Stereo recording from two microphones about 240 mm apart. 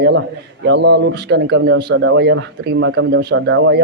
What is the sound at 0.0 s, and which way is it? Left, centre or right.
A man's voice, right.